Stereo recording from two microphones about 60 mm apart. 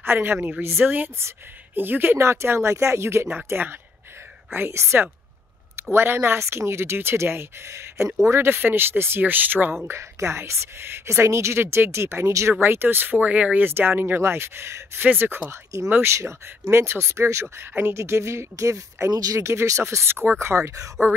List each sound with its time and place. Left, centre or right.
0.0 s speech: right
2.1 s a woman's voice: right
4.6 s a woman's voice: right
9.8 s a woman's voice: right
13.7 s speech: right
15.5 s a woman's voice: right
19.4 s a woman's voice: right